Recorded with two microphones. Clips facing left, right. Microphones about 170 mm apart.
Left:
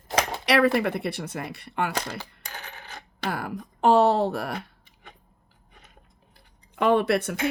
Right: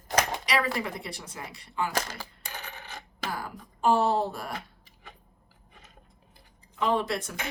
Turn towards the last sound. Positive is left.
turn(degrees=65)  # may be behind; listen again after turning